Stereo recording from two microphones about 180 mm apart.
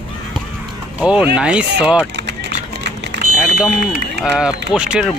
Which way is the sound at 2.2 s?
75° right (ahead or behind).